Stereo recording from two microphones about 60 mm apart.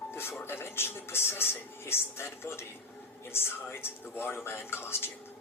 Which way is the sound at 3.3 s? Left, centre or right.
Left.